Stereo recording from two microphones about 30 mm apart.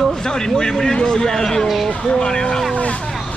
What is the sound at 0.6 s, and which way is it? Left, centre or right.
Speech, centre.